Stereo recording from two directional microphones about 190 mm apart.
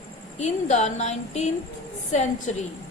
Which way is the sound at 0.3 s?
35° left (ahead or behind).